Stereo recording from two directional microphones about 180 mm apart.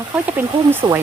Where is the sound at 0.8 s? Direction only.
15° right (ahead or behind).